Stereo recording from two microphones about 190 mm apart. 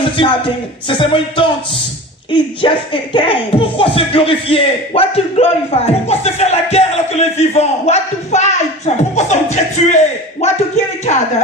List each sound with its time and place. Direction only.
0.9 s speech: 25° left (ahead or behind)